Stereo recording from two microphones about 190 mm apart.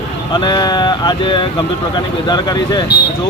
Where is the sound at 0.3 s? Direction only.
25° left (ahead or behind).